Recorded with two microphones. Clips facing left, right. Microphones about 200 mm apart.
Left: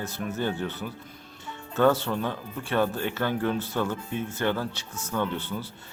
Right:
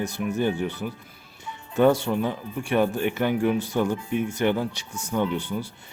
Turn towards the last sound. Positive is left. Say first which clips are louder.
# right 4 dB
turn(degrees=-15)  # may be behind; listen again after turning